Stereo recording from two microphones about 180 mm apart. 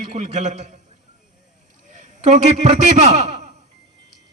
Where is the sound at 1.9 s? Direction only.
45° right (ahead or behind).